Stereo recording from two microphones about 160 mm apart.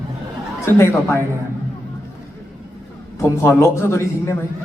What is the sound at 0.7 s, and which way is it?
Speech, 15° left (ahead or behind).